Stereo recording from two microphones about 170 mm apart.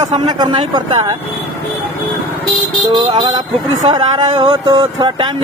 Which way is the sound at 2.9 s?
25° right (ahead or behind).